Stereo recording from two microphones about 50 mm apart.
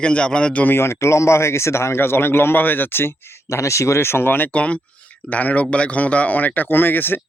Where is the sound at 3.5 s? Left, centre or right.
Left.